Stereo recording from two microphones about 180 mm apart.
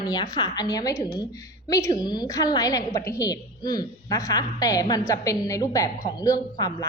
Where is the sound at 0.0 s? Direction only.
25° left (ahead or behind).